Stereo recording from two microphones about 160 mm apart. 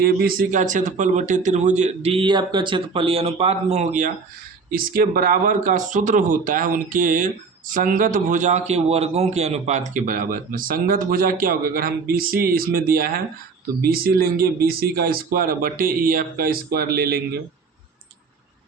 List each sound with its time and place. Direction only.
0.0 s a man's voice: 70° right (ahead or behind); by 4.1 s 50° right (ahead or behind)
4.7 s a man's voice: 65° right (ahead or behind)